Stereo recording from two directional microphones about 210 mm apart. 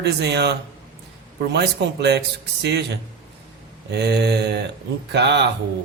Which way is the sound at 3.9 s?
50° right (ahead or behind).